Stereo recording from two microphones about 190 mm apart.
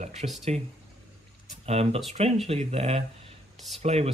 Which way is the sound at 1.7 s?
30° right (ahead or behind).